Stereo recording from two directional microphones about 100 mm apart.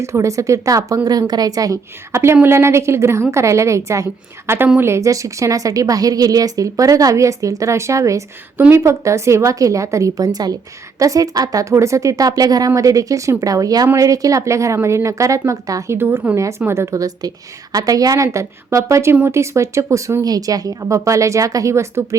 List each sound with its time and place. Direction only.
0.0 s a woman's voice: 30° right (ahead or behind)
16.0 s a woman's voice: 20° right (ahead or behind)